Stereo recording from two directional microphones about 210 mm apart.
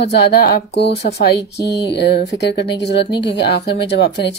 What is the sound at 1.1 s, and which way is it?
Speech, 50° left (ahead or behind).